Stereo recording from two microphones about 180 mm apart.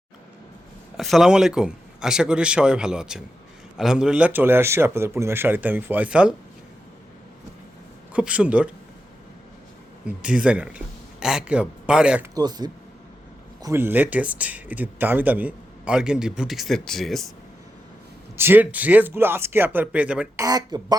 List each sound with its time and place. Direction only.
0.9 s a man's voice: centre (ahead or behind)
8.1 s speech: 5° right (ahead or behind)
10.1 s speech: 5° right (ahead or behind)
12.3 s speech: 20° right (ahead or behind); by 17.3 s centre (ahead or behind)
18.3 s speech: 10° right (ahead or behind)
20.4 s speech: 20° right (ahead or behind)